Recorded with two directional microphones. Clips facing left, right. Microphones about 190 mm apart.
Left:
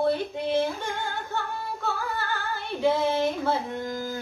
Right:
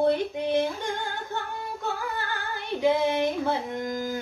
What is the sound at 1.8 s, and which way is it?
Female singing, 15° right (ahead or behind).